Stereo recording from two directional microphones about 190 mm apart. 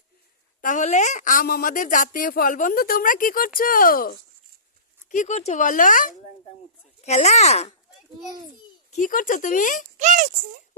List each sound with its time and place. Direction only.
0.6 s a woman's voice: 40° left (ahead or behind)
8.9 s a woman's voice: 45° left (ahead or behind)
10.0 s speech: 40° right (ahead or behind)